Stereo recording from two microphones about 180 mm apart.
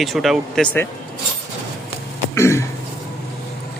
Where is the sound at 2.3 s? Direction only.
15° left (ahead or behind).